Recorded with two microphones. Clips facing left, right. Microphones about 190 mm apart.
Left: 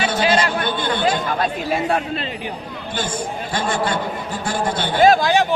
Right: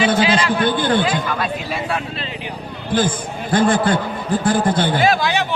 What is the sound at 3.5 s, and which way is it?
A man's voice, 55° right (ahead or behind).